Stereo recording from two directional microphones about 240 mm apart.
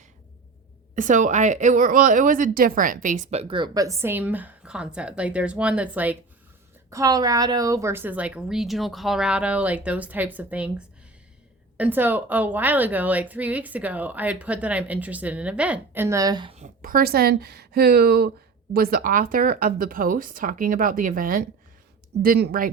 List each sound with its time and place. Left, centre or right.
0.9 s a woman's voice: right